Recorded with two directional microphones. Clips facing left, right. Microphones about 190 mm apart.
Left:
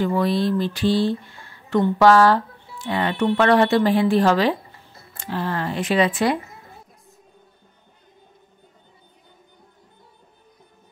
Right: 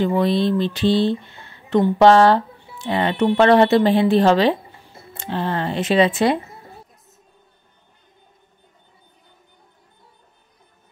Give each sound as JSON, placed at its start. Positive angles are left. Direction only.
{"t": 0.0, "sound": "speech", "side_deg": -25}